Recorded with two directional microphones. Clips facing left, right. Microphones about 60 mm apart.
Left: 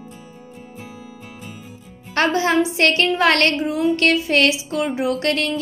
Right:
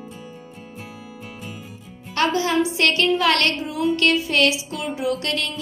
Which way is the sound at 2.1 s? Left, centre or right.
Left.